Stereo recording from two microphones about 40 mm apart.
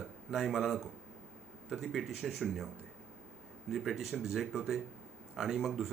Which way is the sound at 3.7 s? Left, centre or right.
Centre.